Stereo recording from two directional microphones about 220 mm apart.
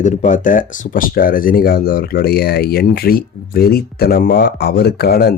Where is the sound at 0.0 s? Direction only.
35° left (ahead or behind).